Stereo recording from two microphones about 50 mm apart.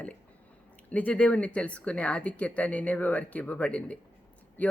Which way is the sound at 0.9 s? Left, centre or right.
Left.